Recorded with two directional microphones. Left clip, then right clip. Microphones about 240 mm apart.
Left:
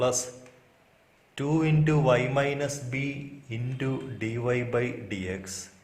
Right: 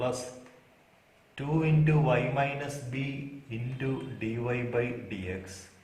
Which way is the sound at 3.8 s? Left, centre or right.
Left.